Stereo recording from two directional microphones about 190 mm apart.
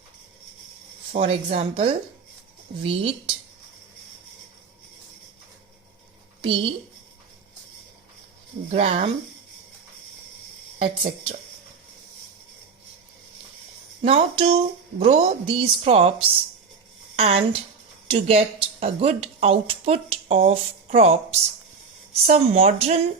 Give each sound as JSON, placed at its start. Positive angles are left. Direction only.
{"t": 1.1, "sound": "speech", "side_deg": -35}
{"t": 6.4, "sound": "speech", "side_deg": -25}
{"t": 8.7, "sound": "speech", "side_deg": -35}
{"t": 10.8, "sound": "speech", "side_deg": -30}
{"t": 14.0, "sound": "speech", "side_deg": -30}
{"t": 17.2, "sound": "speech", "side_deg": -35}